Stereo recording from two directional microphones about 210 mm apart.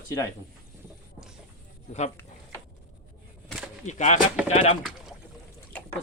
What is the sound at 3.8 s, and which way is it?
Speech, 35° left (ahead or behind).